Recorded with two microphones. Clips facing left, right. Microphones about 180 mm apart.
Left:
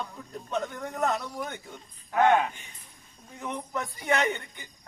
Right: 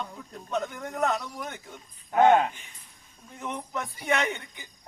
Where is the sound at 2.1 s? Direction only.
25° right (ahead or behind).